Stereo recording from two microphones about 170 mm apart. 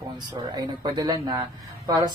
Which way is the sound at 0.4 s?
25° right (ahead or behind).